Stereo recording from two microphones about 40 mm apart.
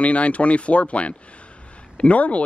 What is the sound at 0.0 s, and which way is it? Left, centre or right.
Speech, left.